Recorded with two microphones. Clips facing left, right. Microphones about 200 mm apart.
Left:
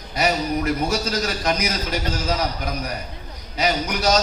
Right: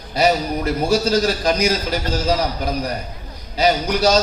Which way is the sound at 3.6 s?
30° right (ahead or behind).